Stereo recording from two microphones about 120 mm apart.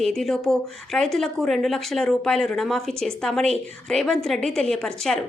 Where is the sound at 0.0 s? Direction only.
5° left (ahead or behind).